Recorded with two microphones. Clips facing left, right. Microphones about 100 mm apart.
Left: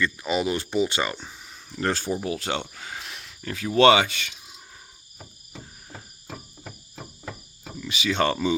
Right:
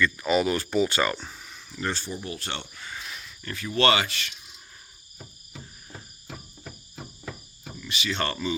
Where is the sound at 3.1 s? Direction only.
70° left (ahead or behind).